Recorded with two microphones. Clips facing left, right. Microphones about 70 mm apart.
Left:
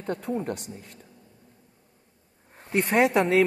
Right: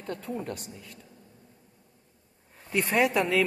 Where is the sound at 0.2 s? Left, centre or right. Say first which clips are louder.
Left 5 dB; left.